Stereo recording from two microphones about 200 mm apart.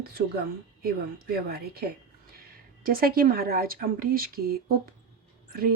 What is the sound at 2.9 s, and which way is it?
Speech, 45° right (ahead or behind).